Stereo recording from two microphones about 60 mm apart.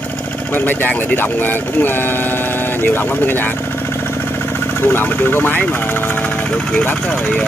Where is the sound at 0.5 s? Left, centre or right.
Left.